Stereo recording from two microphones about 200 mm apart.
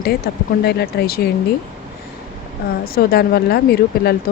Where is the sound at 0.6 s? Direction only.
55° left (ahead or behind).